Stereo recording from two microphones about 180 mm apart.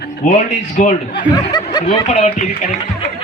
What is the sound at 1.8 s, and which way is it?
Speech, 40° left (ahead or behind).